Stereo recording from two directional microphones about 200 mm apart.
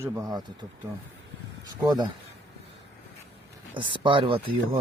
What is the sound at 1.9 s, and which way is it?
Speech, 20° right (ahead or behind).